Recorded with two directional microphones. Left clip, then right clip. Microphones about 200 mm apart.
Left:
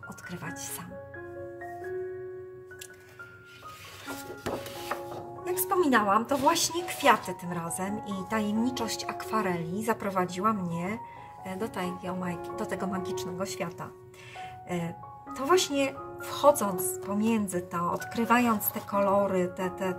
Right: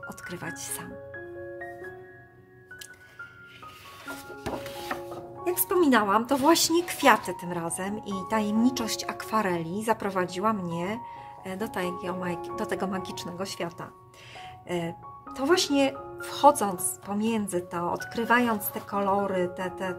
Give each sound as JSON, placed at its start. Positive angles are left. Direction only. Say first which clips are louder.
{"t": 0.3, "sound": "speech", "louder": "right 1 dB", "side_deg": -40}
{"t": 5.5, "sound": "a woman's voice", "louder": "right 2 dB", "side_deg": -45}
{"t": 15.3, "sound": "speech", "louder": "right 1 dB", "side_deg": -35}